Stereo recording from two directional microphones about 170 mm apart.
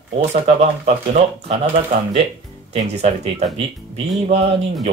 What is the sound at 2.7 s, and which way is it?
Speech, 40° right (ahead or behind).